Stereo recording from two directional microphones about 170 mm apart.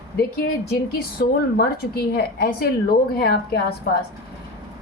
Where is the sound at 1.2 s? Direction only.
65° left (ahead or behind).